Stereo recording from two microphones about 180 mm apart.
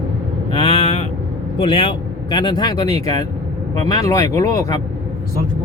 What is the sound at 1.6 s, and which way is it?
Speech, 30° left (ahead or behind).